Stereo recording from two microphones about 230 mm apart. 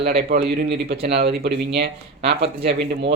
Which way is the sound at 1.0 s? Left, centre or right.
Right.